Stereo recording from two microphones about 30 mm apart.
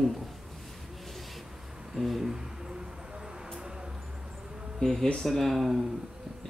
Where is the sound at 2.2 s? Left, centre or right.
Centre.